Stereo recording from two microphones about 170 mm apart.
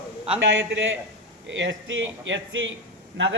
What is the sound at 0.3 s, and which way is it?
A man's voice, 90° right.